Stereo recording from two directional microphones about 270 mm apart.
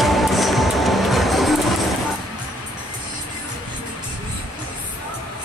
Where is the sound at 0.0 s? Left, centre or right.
Centre.